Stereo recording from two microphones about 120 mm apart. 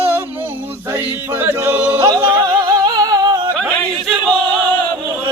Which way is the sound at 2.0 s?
30° right (ahead or behind).